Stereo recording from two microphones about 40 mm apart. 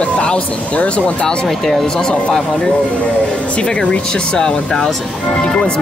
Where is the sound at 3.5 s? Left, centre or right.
Left.